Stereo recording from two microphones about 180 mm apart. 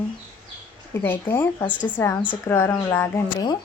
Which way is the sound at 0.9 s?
15° left (ahead or behind).